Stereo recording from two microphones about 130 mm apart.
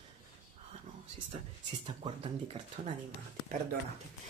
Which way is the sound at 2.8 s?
65° right (ahead or behind).